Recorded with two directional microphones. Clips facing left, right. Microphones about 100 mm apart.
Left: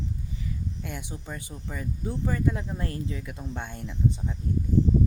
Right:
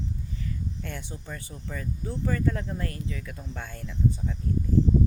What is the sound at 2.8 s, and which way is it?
Speech, 25° left (ahead or behind).